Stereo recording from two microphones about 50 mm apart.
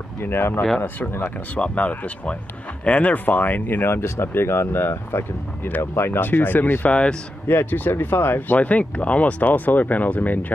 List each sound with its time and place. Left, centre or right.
0.2 s speech: left
0.7 s speech: left
3.8 s speech: left
7.4 s speech: left